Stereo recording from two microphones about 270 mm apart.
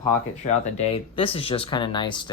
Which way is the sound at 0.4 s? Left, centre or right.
Left.